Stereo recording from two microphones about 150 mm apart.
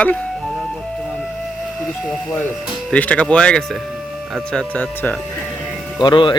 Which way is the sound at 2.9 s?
10° left (ahead or behind).